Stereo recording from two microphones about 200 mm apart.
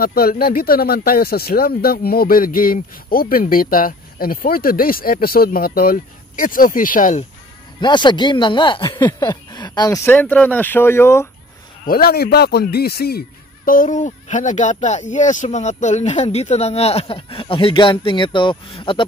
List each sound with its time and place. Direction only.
0.0 s speech: 50° left (ahead or behind)
7.8 s speech: 25° left (ahead or behind)
11.8 s speech: 50° left (ahead or behind)
13.7 s speech: 40° left (ahead or behind); by 19.0 s 25° left (ahead or behind)